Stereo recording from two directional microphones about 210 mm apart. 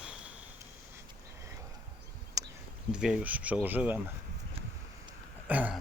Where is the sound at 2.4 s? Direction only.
15° right (ahead or behind).